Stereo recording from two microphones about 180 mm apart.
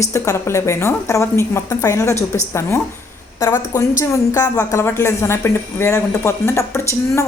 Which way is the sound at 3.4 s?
15° left (ahead or behind).